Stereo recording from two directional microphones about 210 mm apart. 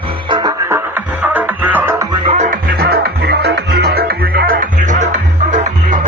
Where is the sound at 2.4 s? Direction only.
45° right (ahead or behind).